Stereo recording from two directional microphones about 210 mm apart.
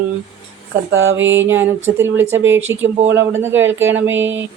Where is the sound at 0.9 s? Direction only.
65° right (ahead or behind).